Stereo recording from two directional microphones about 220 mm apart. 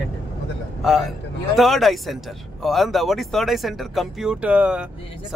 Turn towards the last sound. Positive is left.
turn(degrees=-5)  # may be behind; listen again after turning